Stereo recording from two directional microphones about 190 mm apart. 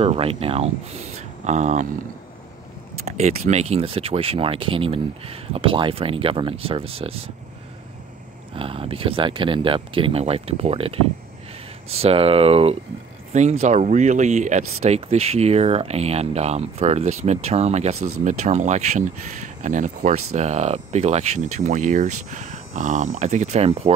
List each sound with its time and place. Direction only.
0.0 s speech: 30° right (ahead or behind)
3.1 s speech: 35° right (ahead or behind)
8.5 s speech: 30° right (ahead or behind)